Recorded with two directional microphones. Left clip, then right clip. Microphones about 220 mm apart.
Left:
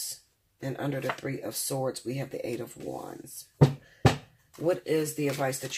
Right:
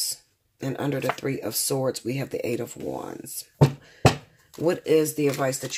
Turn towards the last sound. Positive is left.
turn(degrees=-45)  # may be behind; listen again after turning